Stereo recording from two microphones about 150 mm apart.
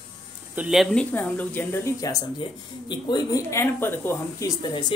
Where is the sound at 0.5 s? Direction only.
5° right (ahead or behind); by 1.9 s 10° left (ahead or behind).